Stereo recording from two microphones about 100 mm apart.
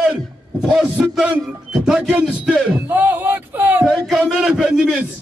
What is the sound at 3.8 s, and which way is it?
A man's voice, 5° right (ahead or behind).